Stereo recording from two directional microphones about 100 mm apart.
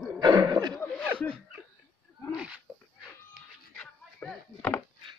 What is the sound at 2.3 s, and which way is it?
Speech, 10° right (ahead or behind).